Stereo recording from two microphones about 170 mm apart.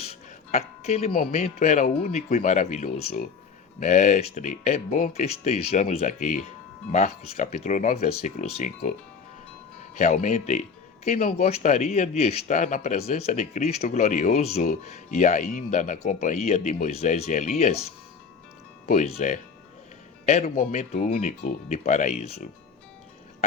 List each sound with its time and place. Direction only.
0.0 s music: 40° left (ahead or behind)
1.3 s speech: 40° left (ahead or behind)
10.0 s speech: 45° left (ahead or behind)
18.9 s speech: 40° left (ahead or behind)
20.4 s speech: 45° left (ahead or behind)